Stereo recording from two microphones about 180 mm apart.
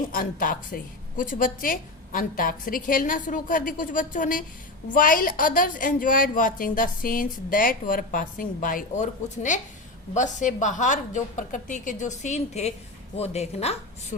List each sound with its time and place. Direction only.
0.1 s speech: 50° left (ahead or behind)